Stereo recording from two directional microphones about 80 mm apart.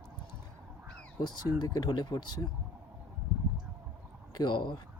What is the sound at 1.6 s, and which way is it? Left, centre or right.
Speech, left.